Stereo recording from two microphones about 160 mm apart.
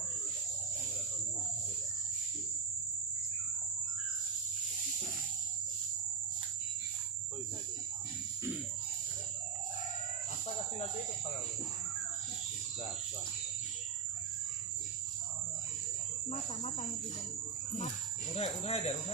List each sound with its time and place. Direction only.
18.3 s speech: 40° left (ahead or behind)